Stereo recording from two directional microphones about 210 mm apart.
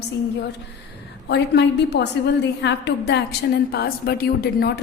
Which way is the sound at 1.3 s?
55° left (ahead or behind).